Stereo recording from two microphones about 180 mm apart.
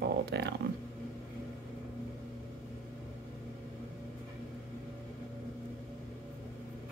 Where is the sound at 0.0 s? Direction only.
65° right (ahead or behind).